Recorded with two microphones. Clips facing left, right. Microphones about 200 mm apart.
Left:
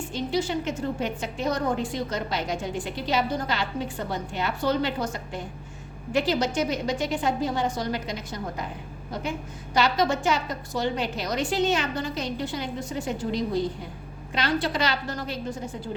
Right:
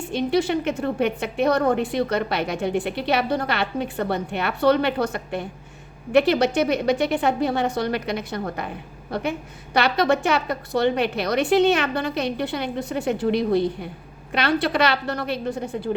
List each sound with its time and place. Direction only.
0.1 s a woman's voice: 65° right (ahead or behind)
9.7 s a woman's voice: 65° right (ahead or behind)